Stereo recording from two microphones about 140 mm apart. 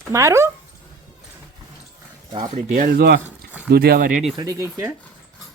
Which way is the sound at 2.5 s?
85° right.